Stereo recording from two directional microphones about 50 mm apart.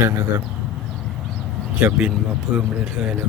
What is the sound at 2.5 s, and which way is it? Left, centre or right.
Speech, right.